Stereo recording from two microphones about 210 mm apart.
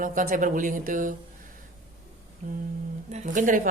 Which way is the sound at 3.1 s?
35° right (ahead or behind).